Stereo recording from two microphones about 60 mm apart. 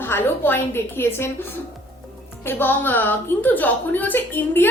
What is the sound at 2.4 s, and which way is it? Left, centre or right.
A woman's voice, left.